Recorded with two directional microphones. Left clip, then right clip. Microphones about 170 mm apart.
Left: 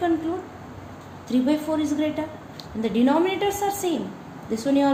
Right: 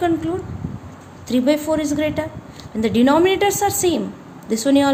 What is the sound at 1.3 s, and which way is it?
A woman's voice, 55° right (ahead or behind).